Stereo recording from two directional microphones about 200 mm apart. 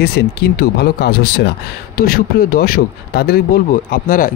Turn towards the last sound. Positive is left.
turn(degrees=45)  # may be behind; listen again after turning